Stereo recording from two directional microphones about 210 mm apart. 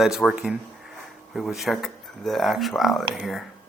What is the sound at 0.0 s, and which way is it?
Speech, centre (ahead or behind).